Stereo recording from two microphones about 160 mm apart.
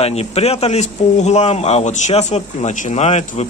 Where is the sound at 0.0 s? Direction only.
40° left (ahead or behind).